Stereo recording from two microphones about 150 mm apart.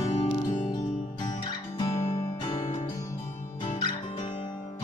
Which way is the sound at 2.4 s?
40° left (ahead or behind).